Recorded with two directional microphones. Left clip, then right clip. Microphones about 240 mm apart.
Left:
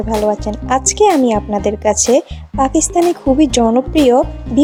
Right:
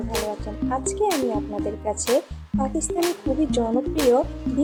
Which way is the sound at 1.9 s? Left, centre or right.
Left.